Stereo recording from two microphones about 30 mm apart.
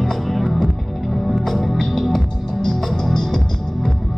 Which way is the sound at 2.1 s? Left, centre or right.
Centre.